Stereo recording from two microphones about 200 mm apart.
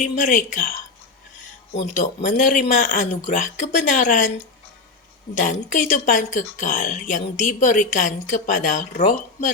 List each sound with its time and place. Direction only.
0.2 s speech: 40° left (ahead or behind)
5.3 s speech: 40° left (ahead or behind)